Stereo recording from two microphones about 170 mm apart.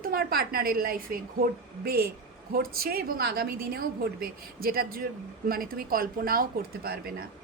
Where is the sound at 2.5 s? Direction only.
60° right (ahead or behind).